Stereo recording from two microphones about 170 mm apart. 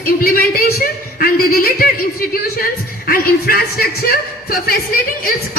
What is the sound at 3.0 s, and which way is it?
A woman's voice, 60° left (ahead or behind).